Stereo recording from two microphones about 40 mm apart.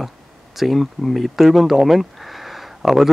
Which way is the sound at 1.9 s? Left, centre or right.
Centre.